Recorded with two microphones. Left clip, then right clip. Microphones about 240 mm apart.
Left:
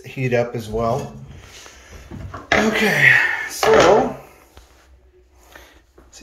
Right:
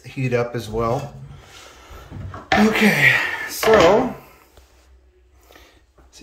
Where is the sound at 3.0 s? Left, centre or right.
Centre.